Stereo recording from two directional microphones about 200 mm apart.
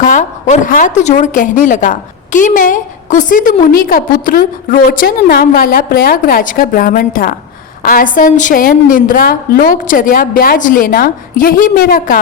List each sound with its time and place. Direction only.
0.0 s a woman's voice: 40° left (ahead or behind)